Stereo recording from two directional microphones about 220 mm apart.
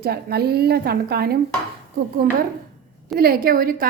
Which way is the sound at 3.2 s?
40° right (ahead or behind).